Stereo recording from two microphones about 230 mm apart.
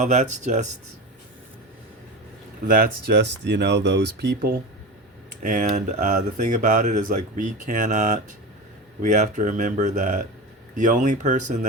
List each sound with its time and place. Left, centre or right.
0.0 s speech: right
2.6 s speech: right